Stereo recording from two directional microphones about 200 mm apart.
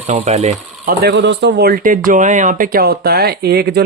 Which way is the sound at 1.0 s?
60° right (ahead or behind).